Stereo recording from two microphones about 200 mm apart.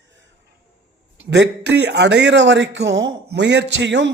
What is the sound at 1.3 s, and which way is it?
A man's voice, 60° right (ahead or behind).